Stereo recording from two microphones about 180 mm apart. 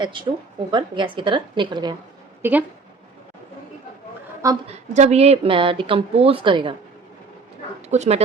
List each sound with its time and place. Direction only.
0.0 s a woman's voice: 25° right (ahead or behind)
2.4 s speech: 10° right (ahead or behind)
4.7 s speech: 35° right (ahead or behind)
7.8 s speech: 40° right (ahead or behind)